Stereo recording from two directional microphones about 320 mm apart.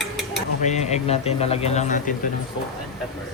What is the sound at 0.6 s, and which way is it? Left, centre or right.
Speech, left.